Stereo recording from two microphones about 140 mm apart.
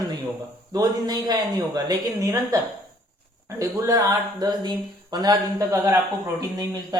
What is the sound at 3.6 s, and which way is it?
Speech, 20° right (ahead or behind).